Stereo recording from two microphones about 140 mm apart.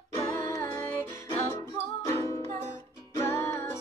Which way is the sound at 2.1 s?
20° left (ahead or behind).